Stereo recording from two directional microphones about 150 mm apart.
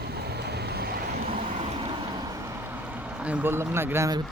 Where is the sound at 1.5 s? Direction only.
40° right (ahead or behind).